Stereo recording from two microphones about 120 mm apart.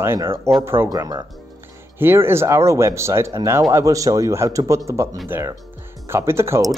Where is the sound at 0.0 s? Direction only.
20° right (ahead or behind).